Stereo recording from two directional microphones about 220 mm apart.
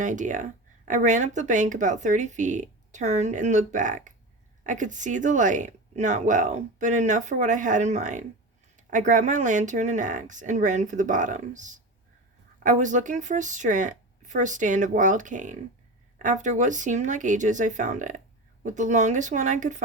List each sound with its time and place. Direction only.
0.0 s speech: 35° right (ahead or behind)